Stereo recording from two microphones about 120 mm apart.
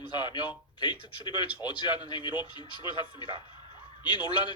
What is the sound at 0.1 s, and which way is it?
A man's voice, 35° left (ahead or behind).